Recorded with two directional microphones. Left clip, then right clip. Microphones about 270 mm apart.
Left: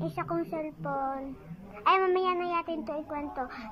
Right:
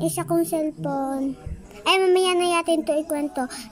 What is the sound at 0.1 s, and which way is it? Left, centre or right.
A child's voice, right.